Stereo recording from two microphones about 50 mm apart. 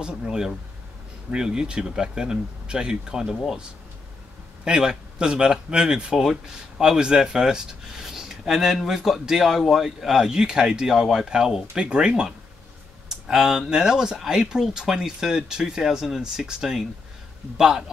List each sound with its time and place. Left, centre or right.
0.0 s speech: centre
4.6 s speech: centre